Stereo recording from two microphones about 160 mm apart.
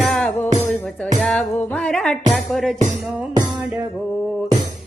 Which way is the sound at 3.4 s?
25° right (ahead or behind).